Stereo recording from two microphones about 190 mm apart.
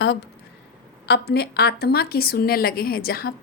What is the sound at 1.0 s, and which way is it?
A woman's voice, 60° left (ahead or behind).